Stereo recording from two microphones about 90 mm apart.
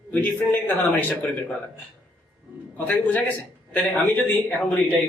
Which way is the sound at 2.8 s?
20° left (ahead or behind).